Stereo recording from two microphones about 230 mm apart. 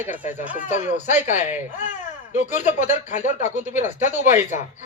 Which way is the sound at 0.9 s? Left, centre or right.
Left.